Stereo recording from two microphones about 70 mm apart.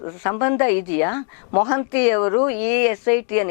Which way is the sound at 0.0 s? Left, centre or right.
Left.